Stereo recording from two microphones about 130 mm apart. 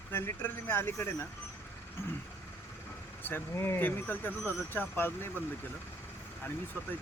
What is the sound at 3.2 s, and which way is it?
Speech, 15° left (ahead or behind).